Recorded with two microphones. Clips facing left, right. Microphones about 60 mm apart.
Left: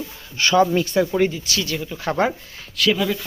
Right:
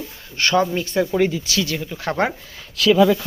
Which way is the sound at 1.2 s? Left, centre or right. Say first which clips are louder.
Right 1 dB; right.